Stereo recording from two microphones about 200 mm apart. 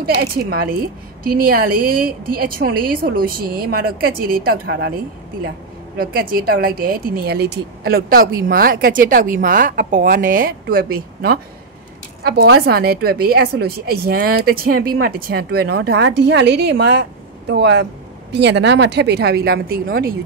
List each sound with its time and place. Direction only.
0.0 s a woman's voice: 50° right (ahead or behind)
5.9 s a woman's voice: 50° right (ahead or behind)